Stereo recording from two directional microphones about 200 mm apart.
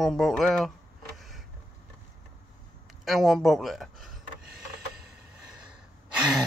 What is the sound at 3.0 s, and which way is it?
Speech, centre (ahead or behind).